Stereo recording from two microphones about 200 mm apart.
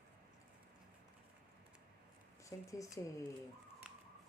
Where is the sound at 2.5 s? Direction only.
15° left (ahead or behind).